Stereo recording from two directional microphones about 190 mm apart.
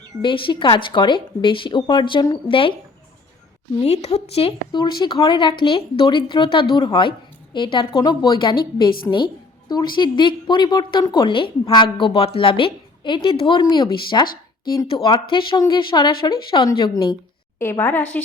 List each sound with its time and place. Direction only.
0.2 s a woman's voice: 25° left (ahead or behind)
3.8 s a woman's voice: 35° left (ahead or behind)
17.6 s a woman's voice: 15° left (ahead or behind)